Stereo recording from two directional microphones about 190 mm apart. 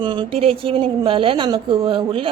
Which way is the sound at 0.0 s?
25° right (ahead or behind).